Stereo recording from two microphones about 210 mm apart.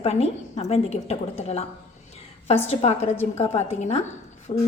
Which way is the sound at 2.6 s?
30° left (ahead or behind).